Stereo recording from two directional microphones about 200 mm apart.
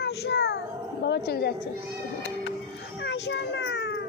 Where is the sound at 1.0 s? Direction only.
55° left (ahead or behind).